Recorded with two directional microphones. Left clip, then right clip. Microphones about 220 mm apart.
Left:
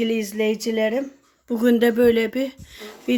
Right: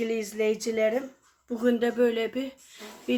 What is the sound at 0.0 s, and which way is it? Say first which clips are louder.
A woman's voice: left 5 dB; 35° left (ahead or behind).